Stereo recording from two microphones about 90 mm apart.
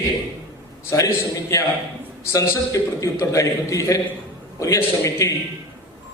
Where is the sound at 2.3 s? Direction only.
35° left (ahead or behind).